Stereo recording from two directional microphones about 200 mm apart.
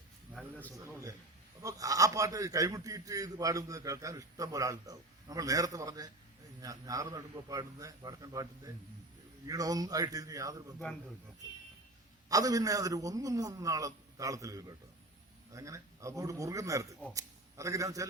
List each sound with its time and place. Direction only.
0.3 s a sound: 5° left (ahead or behind)
0.8 s a man's voice: 15° right (ahead or behind)
12.3 s a man's voice: 15° right (ahead or behind)